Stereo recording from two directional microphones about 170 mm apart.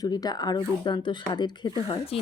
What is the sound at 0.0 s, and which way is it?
A woman's voice, 20° left (ahead or behind).